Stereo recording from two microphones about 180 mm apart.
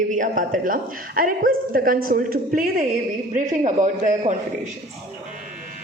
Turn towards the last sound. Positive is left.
turn(degrees=-45)  # may be behind; listen again after turning